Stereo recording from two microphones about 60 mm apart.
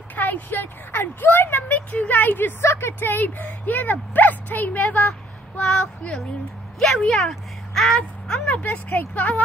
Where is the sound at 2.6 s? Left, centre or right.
Left.